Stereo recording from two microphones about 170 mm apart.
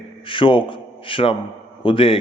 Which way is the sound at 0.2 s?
30° left (ahead or behind).